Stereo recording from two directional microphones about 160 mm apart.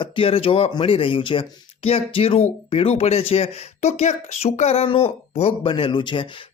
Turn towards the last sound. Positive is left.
turn(degrees=30)  # may be behind; listen again after turning